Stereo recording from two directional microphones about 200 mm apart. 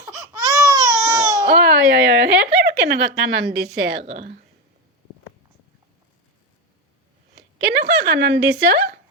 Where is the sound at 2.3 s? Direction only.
50° right (ahead or behind).